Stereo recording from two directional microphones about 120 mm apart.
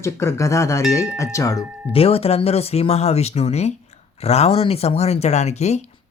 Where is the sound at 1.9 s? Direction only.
55° left (ahead or behind).